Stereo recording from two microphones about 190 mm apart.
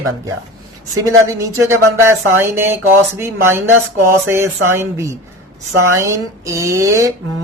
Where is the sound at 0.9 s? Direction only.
15° right (ahead or behind).